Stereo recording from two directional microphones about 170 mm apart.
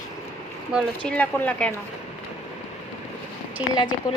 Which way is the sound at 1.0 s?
10° left (ahead or behind).